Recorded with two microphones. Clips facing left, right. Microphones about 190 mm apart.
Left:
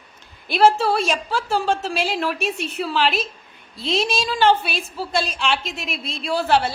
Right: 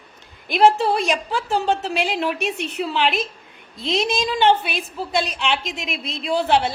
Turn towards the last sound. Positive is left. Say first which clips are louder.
# right 1 dB
turn(degrees=-20)  # may be behind; listen again after turning